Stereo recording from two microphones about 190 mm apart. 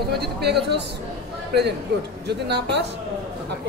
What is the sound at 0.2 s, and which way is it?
Speech, 60° right (ahead or behind).